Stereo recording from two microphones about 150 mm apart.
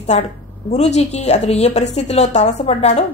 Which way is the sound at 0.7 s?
50° left (ahead or behind).